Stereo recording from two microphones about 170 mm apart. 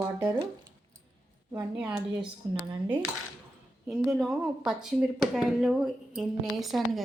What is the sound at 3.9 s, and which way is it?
Speech, centre (ahead or behind).